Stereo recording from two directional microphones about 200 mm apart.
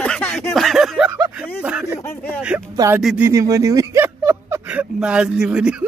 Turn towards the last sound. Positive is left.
turn(degrees=-5)  # may be behind; listen again after turning